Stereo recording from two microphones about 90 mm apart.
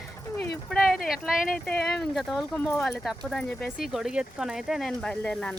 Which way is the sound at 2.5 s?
20° left (ahead or behind).